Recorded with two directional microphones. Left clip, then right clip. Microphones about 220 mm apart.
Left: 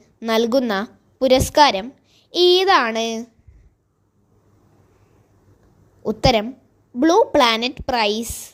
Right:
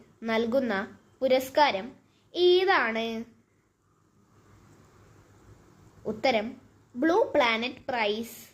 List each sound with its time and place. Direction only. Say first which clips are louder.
0.2 s a woman's voice: left 9 dB; 45° left (ahead or behind)
6.1 s a woman's voice: left 9 dB; 40° left (ahead or behind)